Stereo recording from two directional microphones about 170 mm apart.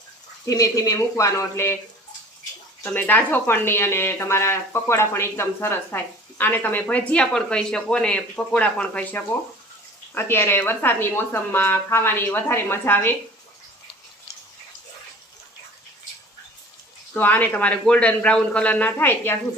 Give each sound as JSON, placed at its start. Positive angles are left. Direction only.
{"t": 0.4, "sound": "speech", "side_deg": 20}
{"t": 2.8, "sound": "speech", "side_deg": 10}
{"t": 17.2, "sound": "speech", "side_deg": 10}